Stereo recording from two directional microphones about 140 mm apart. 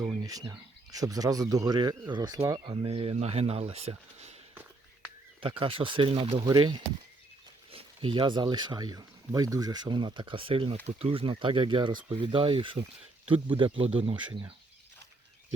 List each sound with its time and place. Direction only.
0.2 s speech: 25° right (ahead or behind)
2.8 s speech: 40° right (ahead or behind)
5.4 s speech: 40° right (ahead or behind)
6.4 s speech: 30° right (ahead or behind)